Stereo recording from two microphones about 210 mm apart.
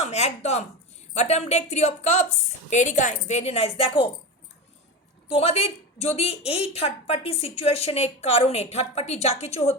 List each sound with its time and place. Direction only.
0.0 s a woman's voice: 30° left (ahead or behind)
5.3 s a woman's voice: 30° left (ahead or behind)